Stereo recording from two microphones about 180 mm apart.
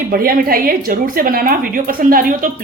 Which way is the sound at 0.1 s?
55° right (ahead or behind).